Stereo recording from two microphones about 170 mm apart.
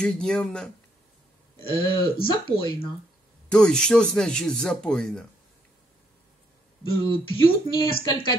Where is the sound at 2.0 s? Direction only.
25° left (ahead or behind).